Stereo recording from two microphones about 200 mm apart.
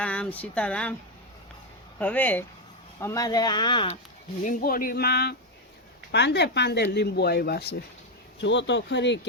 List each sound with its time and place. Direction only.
0.0 s speech: 5° left (ahead or behind)
2.0 s speech: 10° left (ahead or behind); by 3.9 s 25° left (ahead or behind)
4.4 s speech: 45° left (ahead or behind)